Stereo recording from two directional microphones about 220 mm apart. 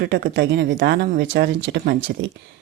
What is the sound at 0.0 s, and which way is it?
Speech, 50° right (ahead or behind).